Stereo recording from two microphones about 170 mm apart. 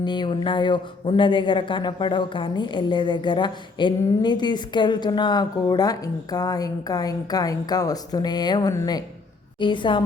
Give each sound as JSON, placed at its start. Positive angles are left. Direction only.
{"t": 0.0, "sound": "speech", "side_deg": 25}